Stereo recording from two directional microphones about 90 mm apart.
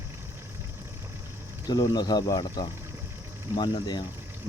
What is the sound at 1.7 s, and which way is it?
Speech, 50° left (ahead or behind).